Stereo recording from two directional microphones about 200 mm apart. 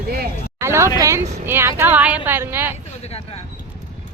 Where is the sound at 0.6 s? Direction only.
15° right (ahead or behind).